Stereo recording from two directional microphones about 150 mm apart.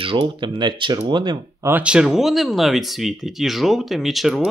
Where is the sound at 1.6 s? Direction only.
10° right (ahead or behind).